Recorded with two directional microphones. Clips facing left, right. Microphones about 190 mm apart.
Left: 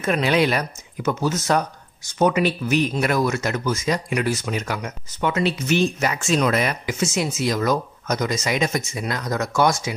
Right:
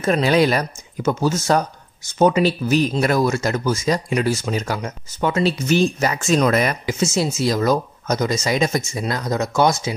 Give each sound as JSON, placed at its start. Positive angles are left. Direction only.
{"t": 0.0, "sound": "speech", "side_deg": -35}
{"t": 6.9, "sound": "speech", "side_deg": -25}